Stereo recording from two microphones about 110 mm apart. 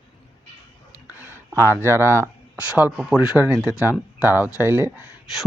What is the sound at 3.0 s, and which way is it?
Speech, 5° right (ahead or behind).